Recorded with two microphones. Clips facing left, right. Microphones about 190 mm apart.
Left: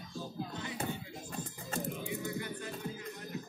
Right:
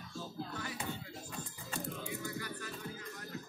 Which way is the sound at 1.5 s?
45° left (ahead or behind).